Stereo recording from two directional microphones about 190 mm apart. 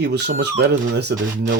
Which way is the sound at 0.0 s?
60° right (ahead or behind).